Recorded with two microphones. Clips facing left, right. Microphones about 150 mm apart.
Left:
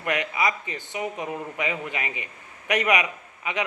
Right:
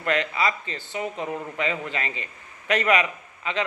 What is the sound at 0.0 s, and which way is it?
Speech, 15° left (ahead or behind).